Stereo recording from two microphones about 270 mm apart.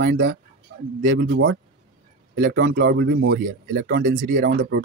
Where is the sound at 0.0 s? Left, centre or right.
Right.